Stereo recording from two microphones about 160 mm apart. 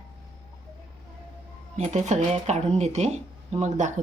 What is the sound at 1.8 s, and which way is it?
Speech, 45° right (ahead or behind).